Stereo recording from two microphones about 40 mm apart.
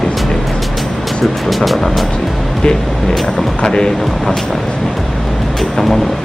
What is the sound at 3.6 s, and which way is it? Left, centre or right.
Speech, centre.